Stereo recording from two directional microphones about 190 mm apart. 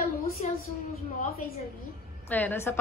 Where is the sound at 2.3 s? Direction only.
10° left (ahead or behind).